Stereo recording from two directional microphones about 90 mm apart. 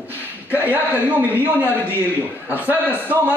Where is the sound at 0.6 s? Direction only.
20° right (ahead or behind).